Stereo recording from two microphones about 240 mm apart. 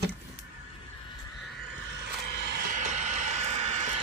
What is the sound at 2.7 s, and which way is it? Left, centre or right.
Vehicle, right.